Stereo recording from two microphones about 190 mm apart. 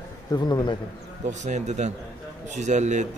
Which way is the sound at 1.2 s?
40° right (ahead or behind).